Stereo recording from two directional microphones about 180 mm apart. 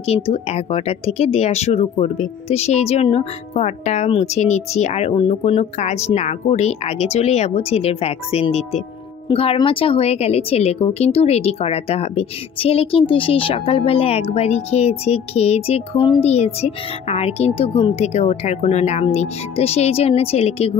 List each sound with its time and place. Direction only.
0.0 s a woman's voice: 35° left (ahead or behind)